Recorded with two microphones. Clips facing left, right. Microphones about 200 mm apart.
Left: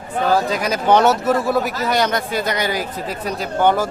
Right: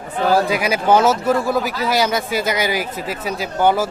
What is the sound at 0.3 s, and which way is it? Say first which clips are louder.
Speech: right 2 dB; 10° right (ahead or behind).